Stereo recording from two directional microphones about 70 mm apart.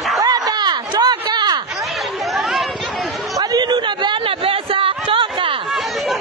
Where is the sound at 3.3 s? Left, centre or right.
Right.